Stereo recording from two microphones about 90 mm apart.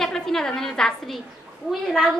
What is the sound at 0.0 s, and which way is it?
A woman's voice, 5° left (ahead or behind).